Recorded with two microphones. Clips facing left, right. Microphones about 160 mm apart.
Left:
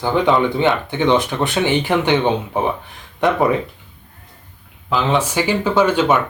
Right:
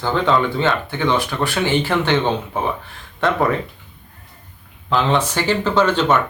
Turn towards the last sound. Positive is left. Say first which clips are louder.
# left 1 dB
turn(degrees=10)  # may be behind; listen again after turning